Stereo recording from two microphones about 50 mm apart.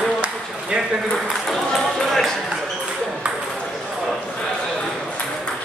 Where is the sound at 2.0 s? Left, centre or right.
Centre.